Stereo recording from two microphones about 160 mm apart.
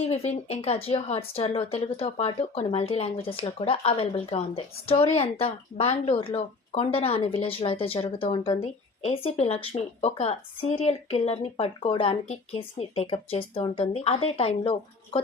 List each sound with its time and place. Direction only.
0.0 s speech: 40° left (ahead or behind)